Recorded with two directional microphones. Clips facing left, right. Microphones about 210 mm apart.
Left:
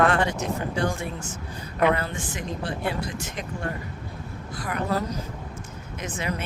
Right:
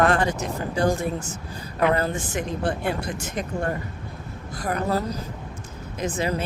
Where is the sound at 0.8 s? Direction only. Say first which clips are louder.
Right 5 dB; 40° right (ahead or behind).